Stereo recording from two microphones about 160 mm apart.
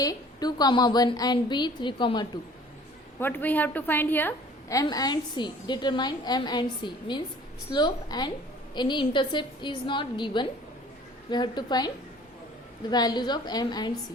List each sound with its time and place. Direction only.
0.0 s a woman's voice: 25° left (ahead or behind)
3.2 s a woman's voice: 10° left (ahead or behind)
12.9 s a woman's voice: 25° left (ahead or behind)